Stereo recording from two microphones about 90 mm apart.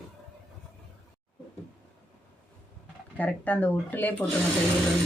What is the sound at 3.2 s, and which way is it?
Speech, 20° left (ahead or behind).